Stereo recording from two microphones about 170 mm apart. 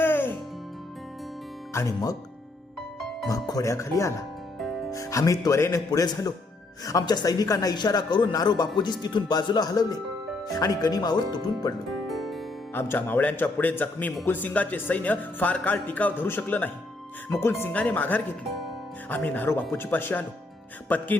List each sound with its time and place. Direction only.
0.0 s music: 10° left (ahead or behind)
1.7 s a man's voice: 20° left (ahead or behind)
3.2 s a man's voice: 20° left (ahead or behind)
11.9 s music: centre (ahead or behind)
12.7 s speech: 10° left (ahead or behind)
18.5 s music: 5° left (ahead or behind)
19.7 s speech: 15° left (ahead or behind)